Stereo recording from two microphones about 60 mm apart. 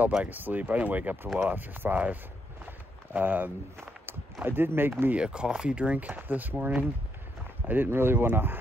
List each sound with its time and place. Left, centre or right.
0.2 s speech: right
5.1 s speech: centre; by 8.5 s right